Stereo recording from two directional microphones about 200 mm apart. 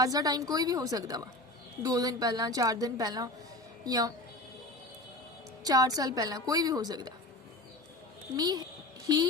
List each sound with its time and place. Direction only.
0.0 s a woman's voice: 20° right (ahead or behind)
5.6 s a woman's voice: 20° right (ahead or behind)
8.4 s a woman's voice: 20° right (ahead or behind)